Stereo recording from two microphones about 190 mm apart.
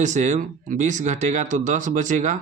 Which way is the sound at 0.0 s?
40° right (ahead or behind).